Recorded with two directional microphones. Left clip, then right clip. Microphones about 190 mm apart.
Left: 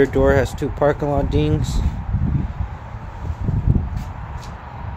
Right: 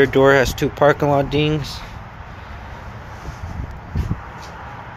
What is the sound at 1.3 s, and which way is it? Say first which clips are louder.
Speech: right 2 dB; 15° left (ahead or behind).